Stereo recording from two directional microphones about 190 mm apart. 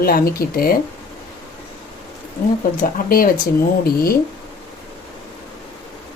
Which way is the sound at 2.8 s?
50° left (ahead or behind).